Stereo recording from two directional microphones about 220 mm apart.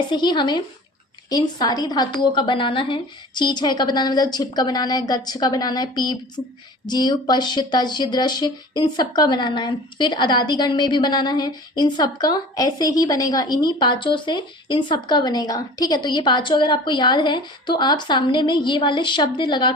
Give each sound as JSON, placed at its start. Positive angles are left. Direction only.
{"t": 0.1, "sound": "speech", "side_deg": 20}